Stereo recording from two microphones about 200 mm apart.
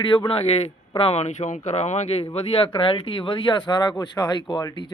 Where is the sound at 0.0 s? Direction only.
25° left (ahead or behind).